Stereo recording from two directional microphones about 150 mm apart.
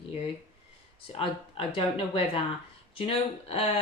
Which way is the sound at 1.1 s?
40° left (ahead or behind).